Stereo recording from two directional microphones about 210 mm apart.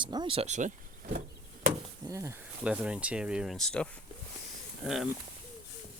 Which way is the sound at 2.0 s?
15° right (ahead or behind).